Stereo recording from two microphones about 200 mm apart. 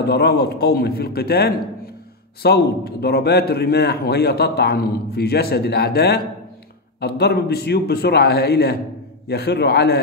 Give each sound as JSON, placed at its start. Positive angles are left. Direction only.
{"t": 0.0, "sound": "a man's voice", "side_deg": 55}